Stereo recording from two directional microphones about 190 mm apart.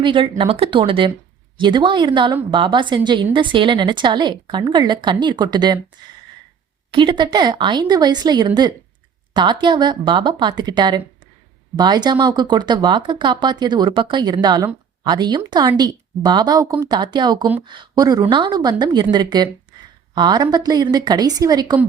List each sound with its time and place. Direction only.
0.0 s a woman's voice: 25° right (ahead or behind)
6.9 s a woman's voice: 25° right (ahead or behind)